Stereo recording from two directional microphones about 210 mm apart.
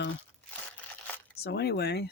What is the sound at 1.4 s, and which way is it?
Speech, 50° left (ahead or behind).